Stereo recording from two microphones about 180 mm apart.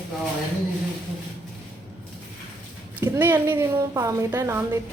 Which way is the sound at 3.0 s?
10° right (ahead or behind).